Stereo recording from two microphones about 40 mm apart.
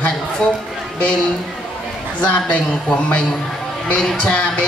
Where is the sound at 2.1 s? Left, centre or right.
Left.